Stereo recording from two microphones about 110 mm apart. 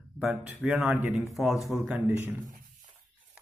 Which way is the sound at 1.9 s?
20° right (ahead or behind).